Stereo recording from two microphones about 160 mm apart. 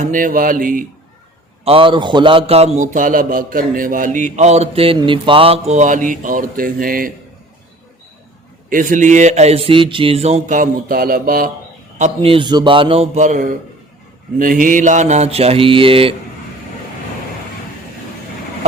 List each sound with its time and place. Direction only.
0.0 s speech: 55° right (ahead or behind)
1.6 s a man's voice: 35° right (ahead or behind); by 7.1 s 65° right (ahead or behind)
8.7 s a man's voice: 55° right (ahead or behind)
11.9 s a man's voice: 40° right (ahead or behind)